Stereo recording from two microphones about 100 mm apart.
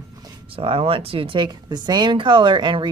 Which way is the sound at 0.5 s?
65° right (ahead or behind).